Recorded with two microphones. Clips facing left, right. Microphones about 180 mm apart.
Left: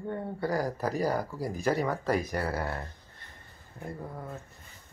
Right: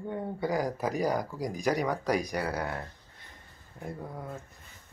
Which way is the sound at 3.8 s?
Centre (ahead or behind).